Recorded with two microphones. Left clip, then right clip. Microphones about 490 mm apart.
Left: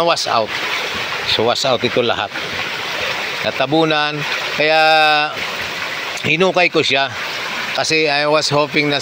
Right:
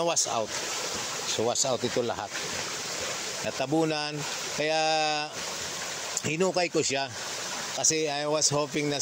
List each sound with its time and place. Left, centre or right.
0.0 s speech: right
3.7 s speech: right